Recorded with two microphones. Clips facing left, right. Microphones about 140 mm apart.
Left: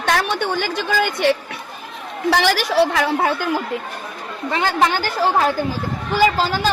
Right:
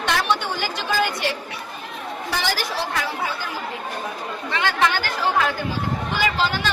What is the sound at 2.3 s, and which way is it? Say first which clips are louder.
A woman's voice: left 9 dB; 75° left (ahead or behind).